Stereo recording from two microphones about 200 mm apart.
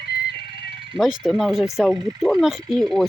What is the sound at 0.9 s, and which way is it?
Speech, centre (ahead or behind).